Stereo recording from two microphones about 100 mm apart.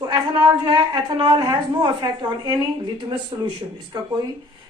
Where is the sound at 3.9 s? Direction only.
45° right (ahead or behind).